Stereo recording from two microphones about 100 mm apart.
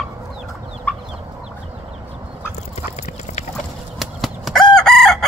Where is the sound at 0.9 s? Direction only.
15° left (ahead or behind).